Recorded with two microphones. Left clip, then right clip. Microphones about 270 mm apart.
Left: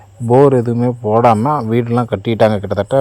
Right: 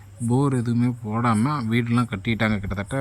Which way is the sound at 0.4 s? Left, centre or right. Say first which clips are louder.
Left 13 dB; left.